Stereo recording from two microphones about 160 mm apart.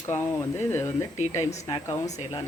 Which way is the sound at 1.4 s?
45° left (ahead or behind).